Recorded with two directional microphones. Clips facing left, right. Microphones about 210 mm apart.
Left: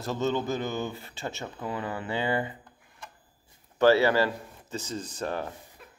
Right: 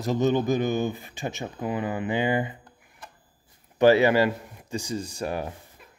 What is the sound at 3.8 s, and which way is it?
Speech, 15° right (ahead or behind).